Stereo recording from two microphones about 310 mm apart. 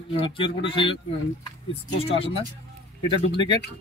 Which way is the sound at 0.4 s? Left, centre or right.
Centre.